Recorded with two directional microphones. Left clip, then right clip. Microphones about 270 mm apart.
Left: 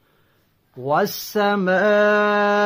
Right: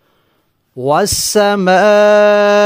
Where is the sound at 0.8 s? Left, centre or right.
Right.